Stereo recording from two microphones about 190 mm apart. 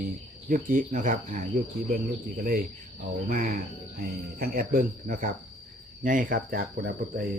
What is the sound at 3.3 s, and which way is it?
Speech, 50° right (ahead or behind).